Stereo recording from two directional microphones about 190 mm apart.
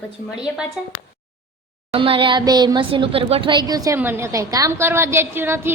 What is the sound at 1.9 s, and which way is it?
A woman's voice, 30° right (ahead or behind).